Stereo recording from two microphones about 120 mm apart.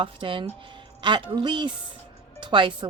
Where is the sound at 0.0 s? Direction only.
45° right (ahead or behind).